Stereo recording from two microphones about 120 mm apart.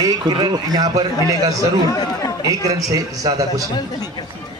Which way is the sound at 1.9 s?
30° left (ahead or behind).